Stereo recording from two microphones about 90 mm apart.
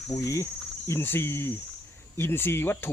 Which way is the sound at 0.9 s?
25° left (ahead or behind).